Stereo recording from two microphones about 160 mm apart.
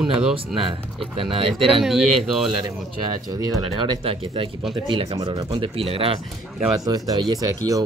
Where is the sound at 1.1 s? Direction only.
35° right (ahead or behind).